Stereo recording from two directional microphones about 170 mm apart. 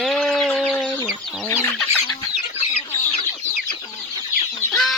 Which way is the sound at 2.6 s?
35° left (ahead or behind).